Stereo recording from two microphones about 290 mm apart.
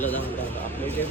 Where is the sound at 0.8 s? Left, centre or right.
Centre.